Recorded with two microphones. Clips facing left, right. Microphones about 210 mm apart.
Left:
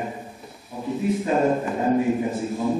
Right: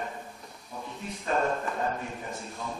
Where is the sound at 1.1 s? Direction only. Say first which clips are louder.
Left 8 dB; 5° left (ahead or behind).